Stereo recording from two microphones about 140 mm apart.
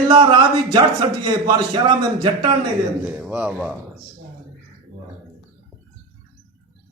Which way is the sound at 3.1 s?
5° right (ahead or behind).